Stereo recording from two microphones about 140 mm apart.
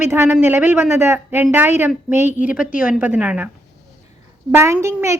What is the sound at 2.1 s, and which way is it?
Speech, 60° left (ahead or behind).